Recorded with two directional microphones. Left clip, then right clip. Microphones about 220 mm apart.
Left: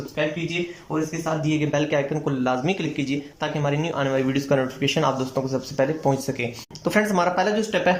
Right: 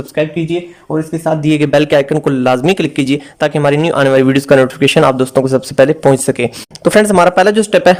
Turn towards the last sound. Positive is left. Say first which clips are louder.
# right 12 dB
turn(degrees=-50)  # may be behind; listen again after turning